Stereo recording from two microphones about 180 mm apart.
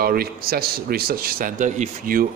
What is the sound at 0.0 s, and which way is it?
A man's voice, 55° right (ahead or behind).